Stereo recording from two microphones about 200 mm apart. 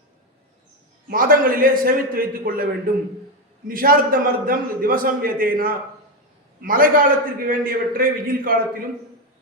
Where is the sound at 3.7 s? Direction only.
45° right (ahead or behind).